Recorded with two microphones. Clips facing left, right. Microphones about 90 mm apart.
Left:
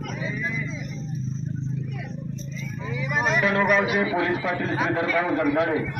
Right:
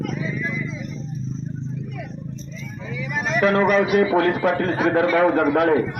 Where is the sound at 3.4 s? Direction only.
50° right (ahead or behind).